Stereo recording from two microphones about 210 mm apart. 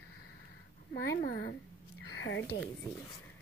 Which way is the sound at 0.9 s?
50° left (ahead or behind).